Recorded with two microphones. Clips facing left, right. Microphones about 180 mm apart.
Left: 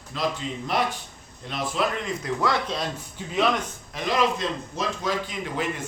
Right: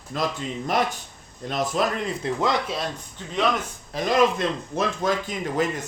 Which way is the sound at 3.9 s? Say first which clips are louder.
Right 4 dB; 45° right (ahead or behind).